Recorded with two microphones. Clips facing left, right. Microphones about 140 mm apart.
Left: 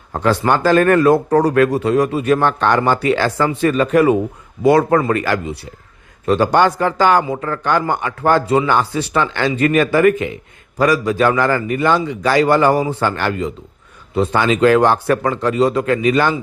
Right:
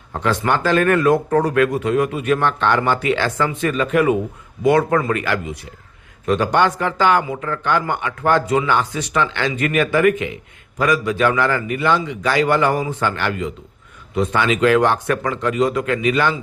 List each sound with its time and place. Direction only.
0.1 s speech: 35° left (ahead or behind)